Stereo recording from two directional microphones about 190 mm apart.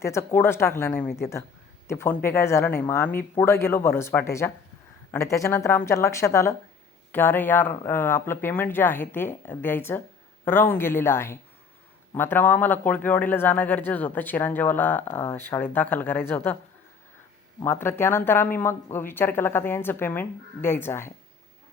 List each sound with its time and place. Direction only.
0.0 s speech: 15° left (ahead or behind)
17.6 s speech: 15° left (ahead or behind)